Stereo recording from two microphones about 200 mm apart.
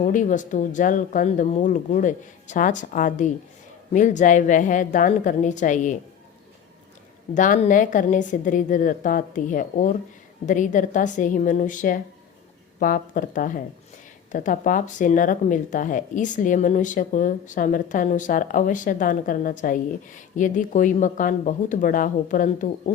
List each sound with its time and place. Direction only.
0.0 s speech: 40° left (ahead or behind)
7.3 s speech: 40° left (ahead or behind)